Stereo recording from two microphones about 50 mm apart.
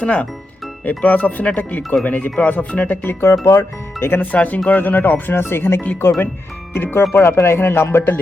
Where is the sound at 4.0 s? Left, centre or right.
Left.